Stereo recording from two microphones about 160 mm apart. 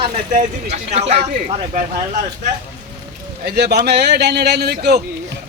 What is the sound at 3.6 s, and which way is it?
A man's voice, 90° right.